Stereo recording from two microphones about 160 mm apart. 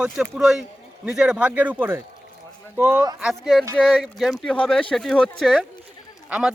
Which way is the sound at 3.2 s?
Centre (ahead or behind).